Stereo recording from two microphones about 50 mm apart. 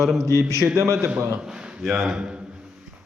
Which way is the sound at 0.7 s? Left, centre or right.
Right.